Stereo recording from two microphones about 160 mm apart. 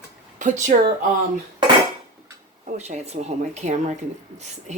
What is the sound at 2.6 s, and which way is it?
Speech, 45° right (ahead or behind).